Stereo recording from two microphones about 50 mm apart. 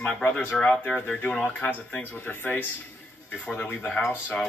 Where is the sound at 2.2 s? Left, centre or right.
Left.